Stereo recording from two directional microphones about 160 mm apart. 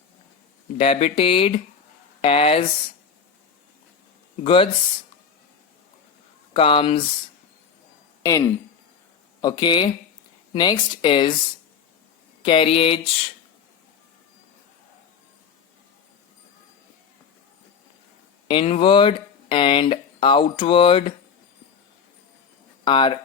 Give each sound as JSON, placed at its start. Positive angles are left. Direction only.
{"t": 0.8, "sound": "speech", "side_deg": 40}
{"t": 4.4, "sound": "speech", "side_deg": 35}
{"t": 6.5, "sound": "speech", "side_deg": 35}
{"t": 8.2, "sound": "speech", "side_deg": 20}
{"t": 12.4, "sound": "speech", "side_deg": 35}
{"t": 18.4, "sound": "speech", "side_deg": 35}
{"t": 22.8, "sound": "speech", "side_deg": 30}